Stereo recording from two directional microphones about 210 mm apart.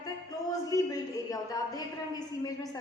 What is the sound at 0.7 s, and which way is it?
A woman's voice, 15° left (ahead or behind).